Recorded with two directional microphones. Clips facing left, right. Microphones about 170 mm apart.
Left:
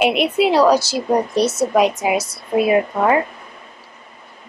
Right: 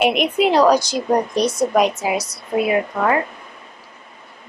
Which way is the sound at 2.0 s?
25° left (ahead or behind).